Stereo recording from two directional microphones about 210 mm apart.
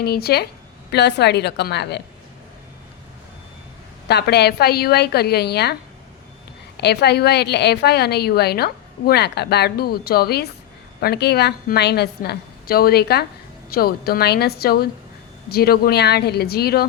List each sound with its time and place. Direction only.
0.0 s a woman's voice: 50° left (ahead or behind)
4.1 s a woman's voice: 50° left (ahead or behind)
6.7 s a woman's voice: 50° left (ahead or behind)